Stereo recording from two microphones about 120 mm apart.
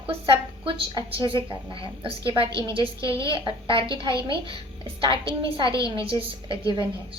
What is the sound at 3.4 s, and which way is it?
Speech, 45° right (ahead or behind).